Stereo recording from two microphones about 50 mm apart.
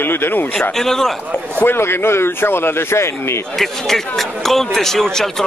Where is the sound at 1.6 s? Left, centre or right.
Left.